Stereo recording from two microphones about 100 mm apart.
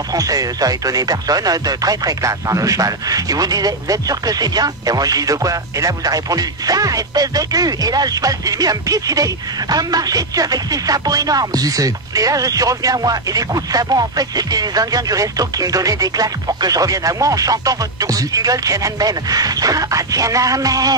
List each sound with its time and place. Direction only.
0.1 s speech: 35° right (ahead or behind)